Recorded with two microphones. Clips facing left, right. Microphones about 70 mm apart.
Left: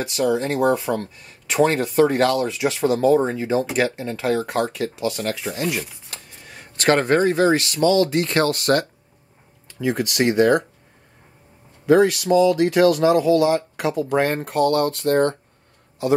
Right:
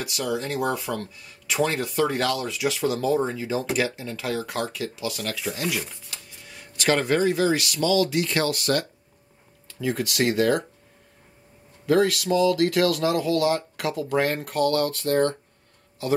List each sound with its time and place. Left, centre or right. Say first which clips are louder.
0.0 s speech: left 7 dB; left
6.0 s speech: left 3 dB; left
9.8 s speech: left 4 dB; centre
11.8 s speech: left 5 dB; centre
14.3 s speech: left 4 dB; left